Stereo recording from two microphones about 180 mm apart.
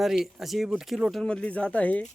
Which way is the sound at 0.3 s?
Centre (ahead or behind).